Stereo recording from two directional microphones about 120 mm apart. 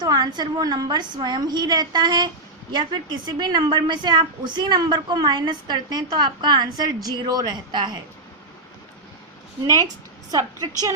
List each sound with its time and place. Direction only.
0.0 s a woman's voice: 35° right (ahead or behind)